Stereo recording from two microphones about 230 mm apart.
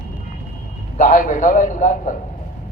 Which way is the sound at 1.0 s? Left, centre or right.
Left.